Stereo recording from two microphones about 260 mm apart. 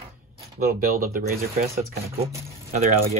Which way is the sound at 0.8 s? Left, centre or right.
Right.